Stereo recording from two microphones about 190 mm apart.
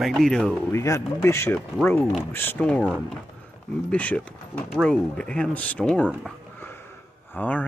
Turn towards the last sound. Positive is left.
turn(degrees=10)  # may be behind; listen again after turning